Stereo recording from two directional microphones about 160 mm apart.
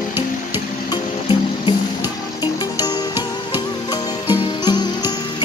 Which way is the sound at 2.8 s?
25° left (ahead or behind).